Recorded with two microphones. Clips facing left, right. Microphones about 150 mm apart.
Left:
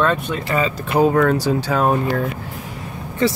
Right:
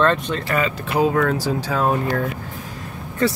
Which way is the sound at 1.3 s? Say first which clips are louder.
Left 4 dB; 65° left (ahead or behind).